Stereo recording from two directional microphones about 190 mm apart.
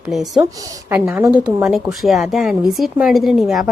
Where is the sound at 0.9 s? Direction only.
15° right (ahead or behind).